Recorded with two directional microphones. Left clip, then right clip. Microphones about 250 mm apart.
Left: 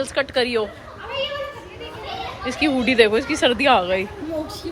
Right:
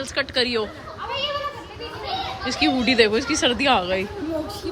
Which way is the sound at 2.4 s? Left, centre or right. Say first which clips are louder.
Left 1 dB; centre.